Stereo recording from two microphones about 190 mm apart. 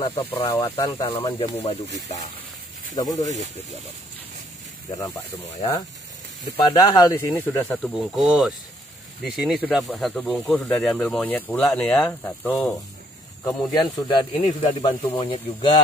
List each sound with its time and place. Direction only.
0.5 s speech: 15° left (ahead or behind)
3.0 s speech: 20° left (ahead or behind)
5.6 s speech: 20° left (ahead or behind)
13.7 s speech: 20° left (ahead or behind)